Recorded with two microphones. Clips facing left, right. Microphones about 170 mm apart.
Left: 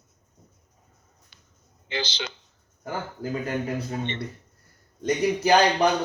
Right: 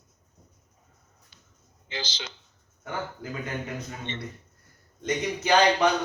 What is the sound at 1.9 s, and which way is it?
Speech, 65° left (ahead or behind).